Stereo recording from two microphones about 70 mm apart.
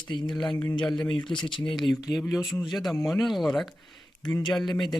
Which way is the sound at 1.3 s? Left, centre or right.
Left.